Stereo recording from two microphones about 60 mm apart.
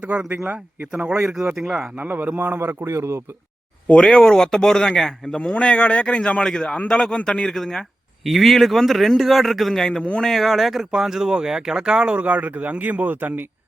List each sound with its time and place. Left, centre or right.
0.0 s a man's voice: right
1.2 s speech: centre
2.0 s a man's voice: right
3.8 s a man's voice: centre
9.8 s a man's voice: centre
10.2 s speech: centre; by 13.5 s right